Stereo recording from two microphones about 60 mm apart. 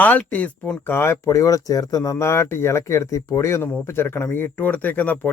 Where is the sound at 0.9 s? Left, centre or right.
Left.